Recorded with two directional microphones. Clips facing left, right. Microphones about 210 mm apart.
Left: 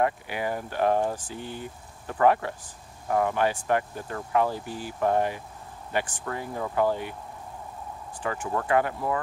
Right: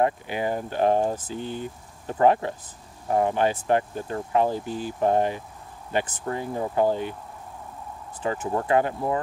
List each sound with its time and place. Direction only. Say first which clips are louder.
0.0 s speech: right 3 dB; 25° right (ahead or behind)
8.2 s speech: right 3 dB; 25° right (ahead or behind)